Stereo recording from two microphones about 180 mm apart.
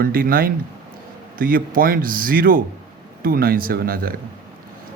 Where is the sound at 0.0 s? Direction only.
55° right (ahead or behind).